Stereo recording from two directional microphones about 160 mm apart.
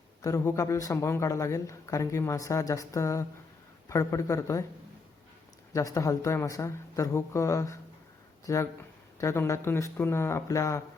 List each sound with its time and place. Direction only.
0.2 s speech: 20° left (ahead or behind)
5.7 s speech: 20° left (ahead or behind)